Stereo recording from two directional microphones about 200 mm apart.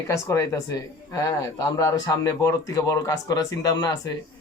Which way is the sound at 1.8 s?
15° left (ahead or behind).